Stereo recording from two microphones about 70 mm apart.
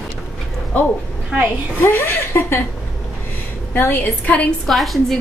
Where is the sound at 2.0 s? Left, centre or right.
Left.